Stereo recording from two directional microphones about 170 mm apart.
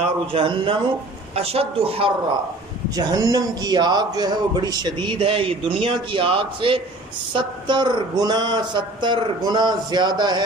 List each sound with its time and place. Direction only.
0.3 s speech: 30° right (ahead or behind)
3.0 s speech: 20° right (ahead or behind)